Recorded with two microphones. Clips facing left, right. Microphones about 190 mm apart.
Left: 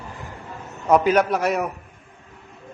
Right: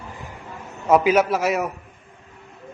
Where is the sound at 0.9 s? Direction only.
5° right (ahead or behind).